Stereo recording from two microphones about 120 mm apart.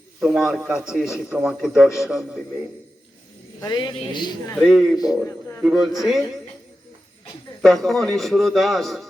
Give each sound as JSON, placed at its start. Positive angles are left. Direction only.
{"t": 0.2, "sound": "a man's voice", "side_deg": 0}
{"t": 3.6, "sound": "speech", "side_deg": 35}
{"t": 4.5, "sound": "a man's voice", "side_deg": 0}
{"t": 7.6, "sound": "a man's voice", "side_deg": 0}